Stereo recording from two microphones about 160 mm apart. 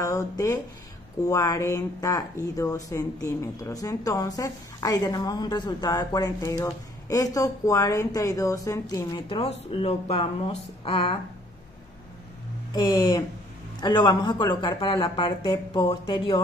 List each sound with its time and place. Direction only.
0.0 s a woman's voice: 20° left (ahead or behind)
12.7 s a woman's voice: 25° left (ahead or behind)